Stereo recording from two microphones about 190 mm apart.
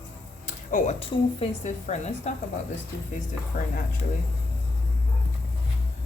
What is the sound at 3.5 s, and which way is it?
Speech, 55° left (ahead or behind).